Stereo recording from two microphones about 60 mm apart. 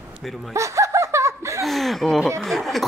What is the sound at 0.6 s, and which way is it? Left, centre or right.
Laughter, right.